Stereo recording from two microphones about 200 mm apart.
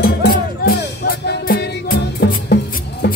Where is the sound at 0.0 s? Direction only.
50° left (ahead or behind).